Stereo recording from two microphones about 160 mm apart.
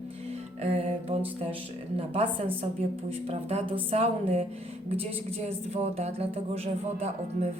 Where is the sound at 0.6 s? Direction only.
40° right (ahead or behind).